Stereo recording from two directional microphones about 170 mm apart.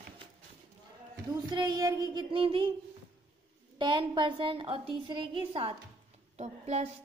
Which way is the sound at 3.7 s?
25° right (ahead or behind).